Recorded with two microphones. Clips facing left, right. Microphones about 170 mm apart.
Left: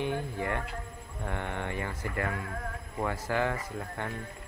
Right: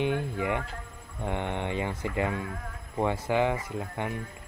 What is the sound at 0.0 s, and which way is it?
Speech, 20° right (ahead or behind).